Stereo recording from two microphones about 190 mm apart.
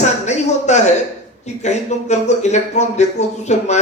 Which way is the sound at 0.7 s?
35° left (ahead or behind).